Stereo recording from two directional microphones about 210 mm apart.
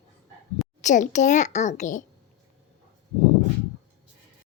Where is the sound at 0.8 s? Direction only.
35° left (ahead or behind).